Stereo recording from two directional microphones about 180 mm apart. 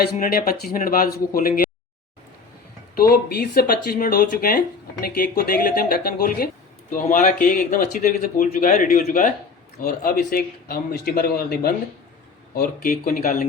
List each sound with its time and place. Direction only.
0.0 s speech: 55° left (ahead or behind)
2.9 s speech: 55° left (ahead or behind)